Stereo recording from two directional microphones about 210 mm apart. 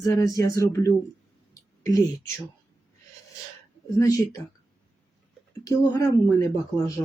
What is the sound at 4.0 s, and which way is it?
Speech, 15° left (ahead or behind).